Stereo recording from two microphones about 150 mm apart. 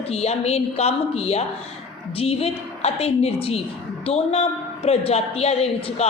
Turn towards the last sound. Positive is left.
turn(degrees=40)  # may be behind; listen again after turning